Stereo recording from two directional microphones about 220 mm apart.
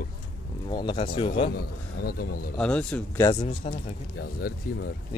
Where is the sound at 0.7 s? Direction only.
20° left (ahead or behind).